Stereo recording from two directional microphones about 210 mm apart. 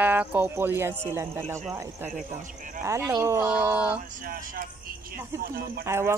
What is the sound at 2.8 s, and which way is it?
Speech, 10° right (ahead or behind).